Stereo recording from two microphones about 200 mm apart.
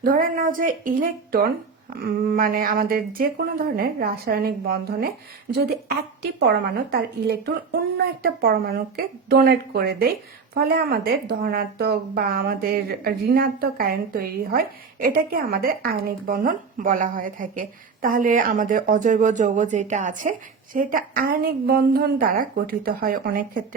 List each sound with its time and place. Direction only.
0.0 s speech: 40° right (ahead or behind)
6.4 s a woman's voice: 55° right (ahead or behind)